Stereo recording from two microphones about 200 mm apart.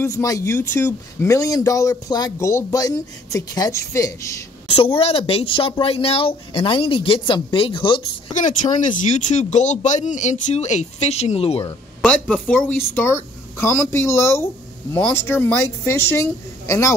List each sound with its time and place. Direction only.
0.0 s a woman's voice: 15° left (ahead or behind)
4.7 s speech: 25° left (ahead or behind)
8.4 s speech: 40° left (ahead or behind)
12.0 s a woman's voice: 5° left (ahead or behind)